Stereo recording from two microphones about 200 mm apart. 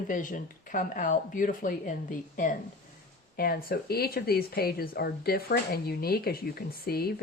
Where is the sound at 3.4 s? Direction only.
45° left (ahead or behind).